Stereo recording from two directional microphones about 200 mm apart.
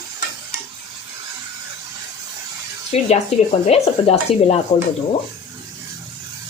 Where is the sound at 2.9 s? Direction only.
30° left (ahead or behind).